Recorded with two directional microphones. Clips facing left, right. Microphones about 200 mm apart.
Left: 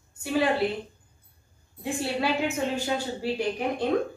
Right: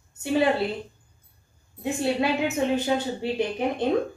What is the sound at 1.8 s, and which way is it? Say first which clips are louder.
A woman's voice: right 4 dB; 20° right (ahead or behind).